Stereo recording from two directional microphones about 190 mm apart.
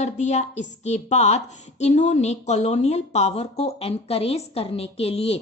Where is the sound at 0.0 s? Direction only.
35° left (ahead or behind).